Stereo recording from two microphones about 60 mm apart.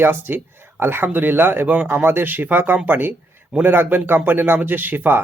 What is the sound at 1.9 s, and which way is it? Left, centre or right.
Speech, right.